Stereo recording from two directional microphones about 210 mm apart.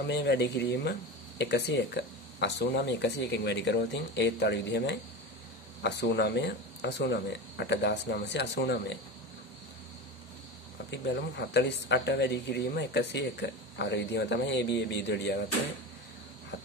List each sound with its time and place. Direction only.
0.0 s speech: 55° left (ahead or behind)
10.9 s speech: 55° left (ahead or behind)